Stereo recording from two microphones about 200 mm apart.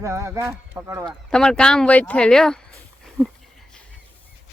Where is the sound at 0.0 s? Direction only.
15° right (ahead or behind).